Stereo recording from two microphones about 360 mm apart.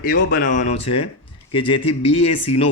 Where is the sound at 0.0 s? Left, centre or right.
Left.